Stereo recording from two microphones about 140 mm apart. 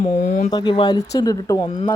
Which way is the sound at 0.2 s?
70° left (ahead or behind).